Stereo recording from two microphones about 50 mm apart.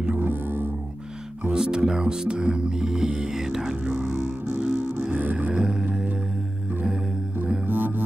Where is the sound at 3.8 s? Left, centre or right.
Right.